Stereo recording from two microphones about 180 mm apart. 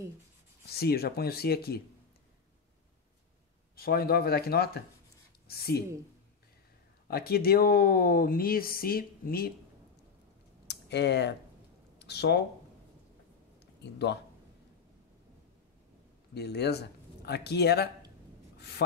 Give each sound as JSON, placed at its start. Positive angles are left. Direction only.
{"t": 0.7, "sound": "speech", "side_deg": 60}
{"t": 3.7, "sound": "speech", "side_deg": 55}
{"t": 7.1, "sound": "speech", "side_deg": 60}
{"t": 10.7, "sound": "speech", "side_deg": 70}
{"t": 16.3, "sound": "speech", "side_deg": 65}
{"t": 18.6, "sound": "a sound", "side_deg": 65}